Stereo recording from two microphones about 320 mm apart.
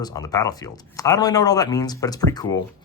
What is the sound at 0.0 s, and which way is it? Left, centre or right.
Speech, centre.